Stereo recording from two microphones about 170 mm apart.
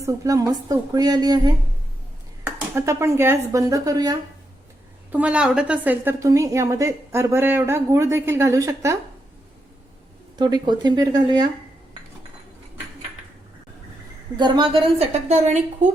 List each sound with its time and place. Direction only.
0.0 s a woman's voice: 20° right (ahead or behind)
5.1 s a woman's voice: 5° right (ahead or behind)
10.3 s a woman's voice: 25° right (ahead or behind)
14.3 s a woman's voice: 25° right (ahead or behind); by 15.9 s 40° right (ahead or behind)